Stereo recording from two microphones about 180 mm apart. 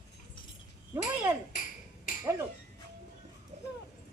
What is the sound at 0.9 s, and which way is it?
Speech, 10° right (ahead or behind).